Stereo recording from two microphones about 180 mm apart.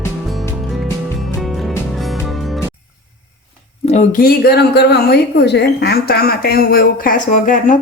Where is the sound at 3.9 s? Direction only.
45° left (ahead or behind).